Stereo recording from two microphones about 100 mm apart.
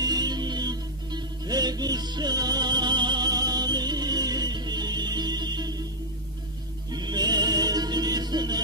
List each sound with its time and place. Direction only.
0.0 s music: 45° right (ahead or behind)
6.9 s music: 45° right (ahead or behind)